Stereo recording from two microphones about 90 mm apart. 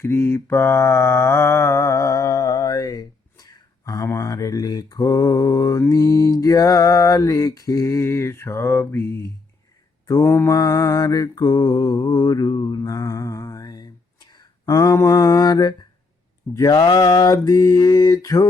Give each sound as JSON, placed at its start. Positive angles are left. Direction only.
{"t": 0.0, "sound": "mantra", "side_deg": 30}
{"t": 12.8, "sound": "mantra", "side_deg": 40}